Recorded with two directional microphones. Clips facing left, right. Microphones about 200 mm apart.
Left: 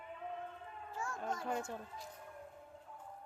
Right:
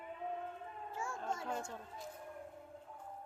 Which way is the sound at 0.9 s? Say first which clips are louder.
Even; 25° right (ahead or behind).